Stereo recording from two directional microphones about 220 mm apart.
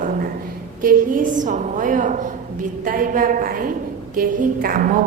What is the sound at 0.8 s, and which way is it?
A woman's voice, 40° right (ahead or behind).